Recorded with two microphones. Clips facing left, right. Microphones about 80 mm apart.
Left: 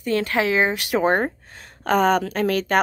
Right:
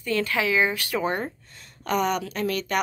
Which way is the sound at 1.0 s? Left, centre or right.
Left.